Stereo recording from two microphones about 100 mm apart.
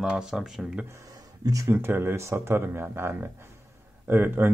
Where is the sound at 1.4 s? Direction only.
35° right (ahead or behind).